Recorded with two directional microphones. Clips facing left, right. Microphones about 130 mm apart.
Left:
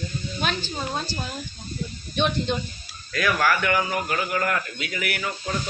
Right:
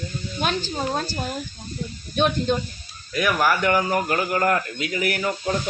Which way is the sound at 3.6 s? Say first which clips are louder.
Right 3 dB; 40° right (ahead or behind).